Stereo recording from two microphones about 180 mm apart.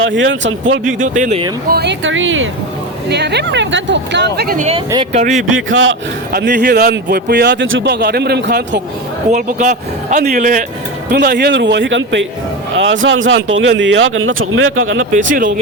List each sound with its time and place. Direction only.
0.0 s speech: 90° right
0.9 s speech: 45° right (ahead or behind)
1.7 s speech: 70° right (ahead or behind); by 2.5 s 90° right
3.1 s speech: 70° right (ahead or behind)
4.4 s speech: 55° right (ahead or behind)
5.1 s speech: 40° right (ahead or behind)
5.5 s speech: 90° right; by 8.8 s 75° right (ahead or behind)
9.3 s speech: 45° right (ahead or behind)
11.1 s a man's voice: 65° right (ahead or behind); by 15.0 s 90° right
15.1 s speech: 45° right (ahead or behind)